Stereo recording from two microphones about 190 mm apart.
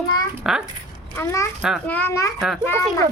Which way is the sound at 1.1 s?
15° left (ahead or behind).